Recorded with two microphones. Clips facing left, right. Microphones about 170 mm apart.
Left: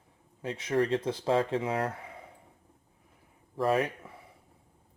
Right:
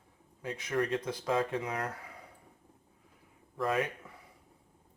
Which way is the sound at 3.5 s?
30° left (ahead or behind).